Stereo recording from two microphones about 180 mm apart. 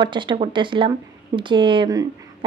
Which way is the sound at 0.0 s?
25° right (ahead or behind).